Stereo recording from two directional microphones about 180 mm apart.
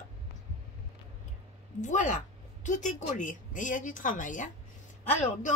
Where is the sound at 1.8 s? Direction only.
45° left (ahead or behind).